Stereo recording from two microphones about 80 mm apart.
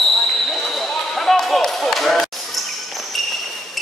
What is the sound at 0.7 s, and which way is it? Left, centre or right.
Basketball bounce, centre.